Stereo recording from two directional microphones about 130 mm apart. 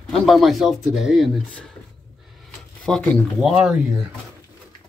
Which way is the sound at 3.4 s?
5° right (ahead or behind).